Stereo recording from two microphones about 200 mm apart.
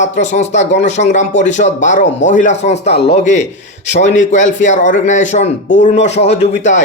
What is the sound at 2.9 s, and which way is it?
Speech, 55° left (ahead or behind).